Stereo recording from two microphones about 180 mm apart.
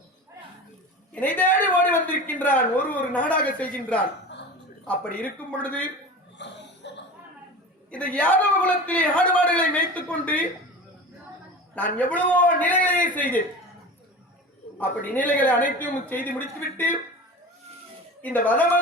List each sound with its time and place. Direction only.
1.1 s speech: 10° left (ahead or behind)
6.4 s cough: 80° left
7.9 s speech: 5° left (ahead or behind)
11.7 s speech: 10° left (ahead or behind)
14.8 s speech: 10° left (ahead or behind)
18.2 s speech: 10° left (ahead or behind)